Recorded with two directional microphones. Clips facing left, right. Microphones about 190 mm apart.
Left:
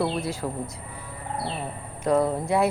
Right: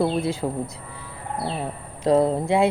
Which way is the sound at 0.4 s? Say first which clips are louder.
Right 4 dB; 25° right (ahead or behind).